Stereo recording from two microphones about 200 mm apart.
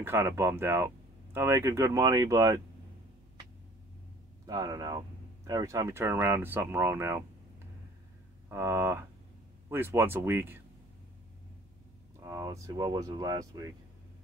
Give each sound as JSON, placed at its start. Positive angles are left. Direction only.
{"t": 0.0, "sound": "speech", "side_deg": -10}
{"t": 4.5, "sound": "speech", "side_deg": -20}
{"t": 8.5, "sound": "speech", "side_deg": -15}
{"t": 12.2, "sound": "speech", "side_deg": -20}